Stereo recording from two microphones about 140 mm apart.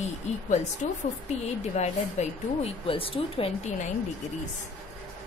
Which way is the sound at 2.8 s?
40° left (ahead or behind).